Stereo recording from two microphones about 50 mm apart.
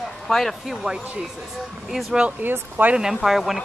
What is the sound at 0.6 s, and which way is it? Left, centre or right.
Speech, centre.